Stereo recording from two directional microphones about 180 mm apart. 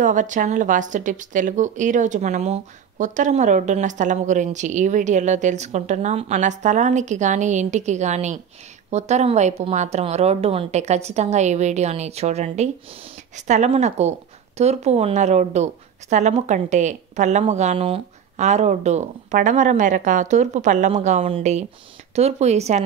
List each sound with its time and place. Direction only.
0.0 s a woman's voice: 45° right (ahead or behind)